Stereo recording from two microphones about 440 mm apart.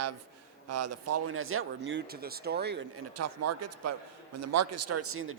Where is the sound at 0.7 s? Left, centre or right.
Right.